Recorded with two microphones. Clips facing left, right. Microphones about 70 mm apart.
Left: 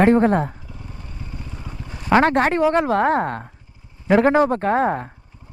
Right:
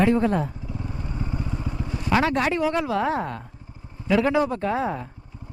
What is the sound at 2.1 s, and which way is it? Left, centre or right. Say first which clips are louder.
Speech: left 6 dB; left.